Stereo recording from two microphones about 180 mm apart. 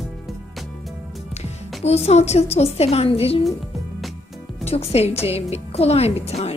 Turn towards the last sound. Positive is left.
turn(degrees=35)  # may be behind; listen again after turning